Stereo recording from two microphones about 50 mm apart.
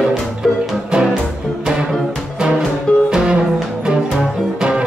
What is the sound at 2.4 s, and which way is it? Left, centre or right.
Music, centre.